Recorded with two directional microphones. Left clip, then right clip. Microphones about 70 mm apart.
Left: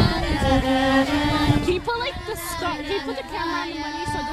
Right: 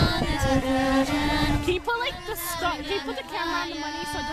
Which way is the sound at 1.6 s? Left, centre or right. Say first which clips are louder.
Left 2 dB; centre.